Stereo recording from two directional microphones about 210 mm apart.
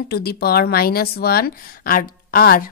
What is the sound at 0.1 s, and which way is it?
Speech, 50° left (ahead or behind).